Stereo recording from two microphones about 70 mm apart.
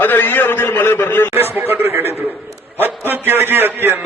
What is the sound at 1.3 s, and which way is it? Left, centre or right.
A man's voice, right.